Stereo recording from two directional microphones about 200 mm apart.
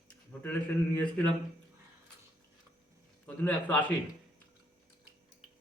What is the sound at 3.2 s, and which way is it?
Speech, 5° left (ahead or behind).